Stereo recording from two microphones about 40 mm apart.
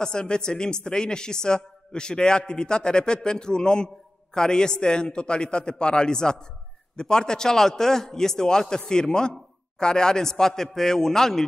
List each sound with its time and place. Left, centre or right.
0.0 s a man's voice: left